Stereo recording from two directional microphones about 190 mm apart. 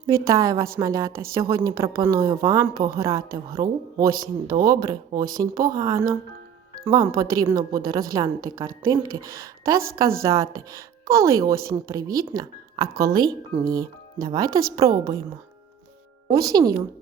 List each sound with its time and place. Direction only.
0.1 s a woman's voice: 15° right (ahead or behind)
12.9 s speech: 50° right (ahead or behind)
13.7 s a woman's voice: 20° right (ahead or behind)
16.3 s a woman's voice: 20° right (ahead or behind)